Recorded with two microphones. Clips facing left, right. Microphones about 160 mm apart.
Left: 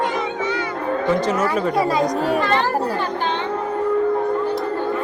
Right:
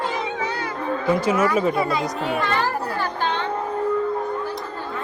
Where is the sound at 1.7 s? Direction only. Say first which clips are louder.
Left 4 dB; 40° left (ahead or behind).